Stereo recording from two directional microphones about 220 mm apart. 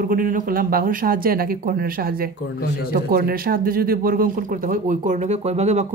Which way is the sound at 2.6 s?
45° left (ahead or behind).